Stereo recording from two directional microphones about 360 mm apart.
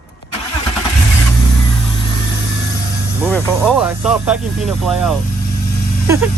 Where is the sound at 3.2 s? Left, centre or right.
Centre.